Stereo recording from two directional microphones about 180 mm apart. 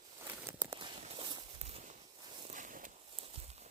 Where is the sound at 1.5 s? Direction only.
35° right (ahead or behind).